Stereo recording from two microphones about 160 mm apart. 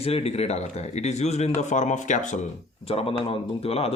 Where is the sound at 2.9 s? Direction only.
35° left (ahead or behind).